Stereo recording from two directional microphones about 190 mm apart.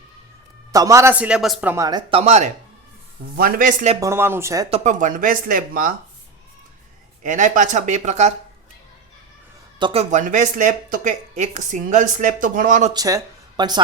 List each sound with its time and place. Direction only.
0.7 s a man's voice: 15° right (ahead or behind)
1.7 s speech: 20° right (ahead or behind); by 2.5 s 35° right (ahead or behind)
3.3 s speech: 45° right (ahead or behind)
4.0 s a man's voice: 15° right (ahead or behind)
4.7 s speech: 35° right (ahead or behind)
7.2 s speech: 40° right (ahead or behind)
9.7 s speech: 30° right (ahead or behind)
12.9 s speech: 20° right (ahead or behind)